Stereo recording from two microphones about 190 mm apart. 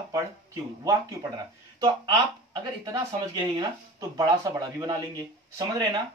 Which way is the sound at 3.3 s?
20° right (ahead or behind).